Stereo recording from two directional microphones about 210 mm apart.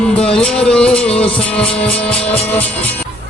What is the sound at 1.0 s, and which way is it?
Music, 25° left (ahead or behind).